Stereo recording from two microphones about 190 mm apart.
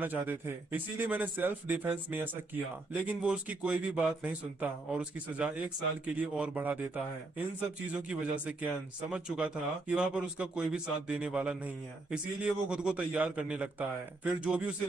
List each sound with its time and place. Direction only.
0.0 s a man's voice: 10° right (ahead or behind)
7.9 s a man's voice: 5° right (ahead or behind)